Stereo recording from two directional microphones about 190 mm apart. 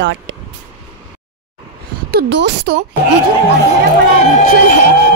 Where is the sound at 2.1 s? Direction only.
65° right (ahead or behind).